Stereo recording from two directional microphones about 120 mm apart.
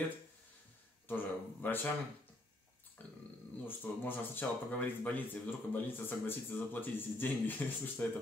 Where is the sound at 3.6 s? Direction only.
15° left (ahead or behind).